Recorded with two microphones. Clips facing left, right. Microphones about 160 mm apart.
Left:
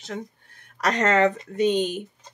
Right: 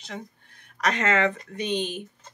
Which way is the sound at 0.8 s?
40° left (ahead or behind).